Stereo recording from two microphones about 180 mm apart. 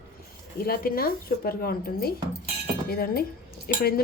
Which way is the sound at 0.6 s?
55° left (ahead or behind).